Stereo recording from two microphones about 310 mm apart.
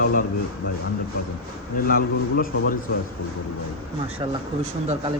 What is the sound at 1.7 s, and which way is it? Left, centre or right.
Speech, left.